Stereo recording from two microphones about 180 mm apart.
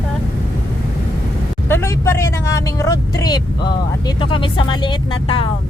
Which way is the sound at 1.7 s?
15° left (ahead or behind).